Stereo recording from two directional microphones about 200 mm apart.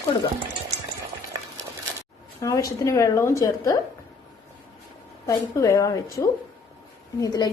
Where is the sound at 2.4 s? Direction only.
15° left (ahead or behind).